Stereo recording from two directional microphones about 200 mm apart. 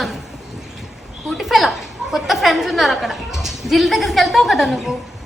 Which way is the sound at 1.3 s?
Centre (ahead or behind).